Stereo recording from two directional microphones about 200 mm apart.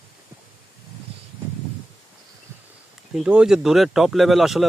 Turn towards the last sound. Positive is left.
turn(degrees=0)  # may be behind; listen again after turning